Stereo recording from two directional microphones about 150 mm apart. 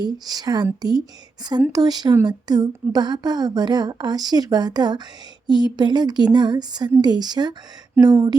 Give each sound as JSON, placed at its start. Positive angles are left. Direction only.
{"t": 0.0, "sound": "speech", "side_deg": -25}